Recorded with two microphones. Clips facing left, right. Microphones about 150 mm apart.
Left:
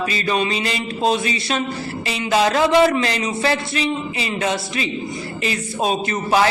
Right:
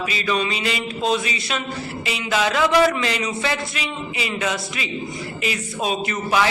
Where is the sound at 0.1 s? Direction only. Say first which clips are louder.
Left 2 dB; 40° left (ahead or behind).